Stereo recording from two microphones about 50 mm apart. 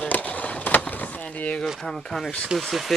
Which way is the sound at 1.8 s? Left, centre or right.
Centre.